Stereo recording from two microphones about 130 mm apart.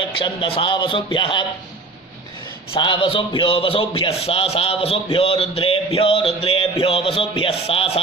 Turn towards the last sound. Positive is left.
turn(degrees=45)  # may be behind; listen again after turning